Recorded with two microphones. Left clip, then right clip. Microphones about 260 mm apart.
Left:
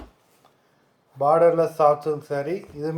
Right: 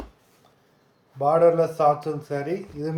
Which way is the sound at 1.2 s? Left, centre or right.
Centre.